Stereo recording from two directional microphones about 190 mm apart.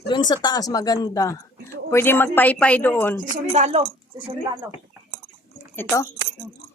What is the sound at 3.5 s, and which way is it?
Speech, 35° right (ahead or behind).